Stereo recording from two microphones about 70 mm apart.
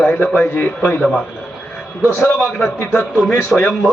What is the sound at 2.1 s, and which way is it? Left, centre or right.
A man's voice, left.